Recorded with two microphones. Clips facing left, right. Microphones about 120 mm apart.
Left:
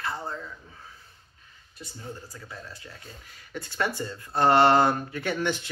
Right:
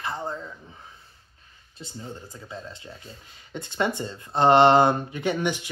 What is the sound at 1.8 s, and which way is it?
Speech, 25° right (ahead or behind).